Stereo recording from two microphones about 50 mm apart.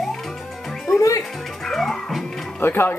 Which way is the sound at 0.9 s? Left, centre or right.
Left.